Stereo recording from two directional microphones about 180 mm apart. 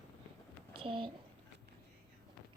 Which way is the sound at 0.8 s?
30° right (ahead or behind).